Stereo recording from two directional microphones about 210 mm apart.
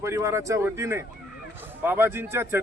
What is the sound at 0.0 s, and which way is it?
A man's voice, 15° right (ahead or behind).